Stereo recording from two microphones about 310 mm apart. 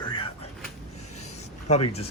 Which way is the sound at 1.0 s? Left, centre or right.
Left.